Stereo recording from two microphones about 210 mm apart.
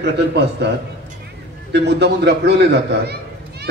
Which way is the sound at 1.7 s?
55° right (ahead or behind).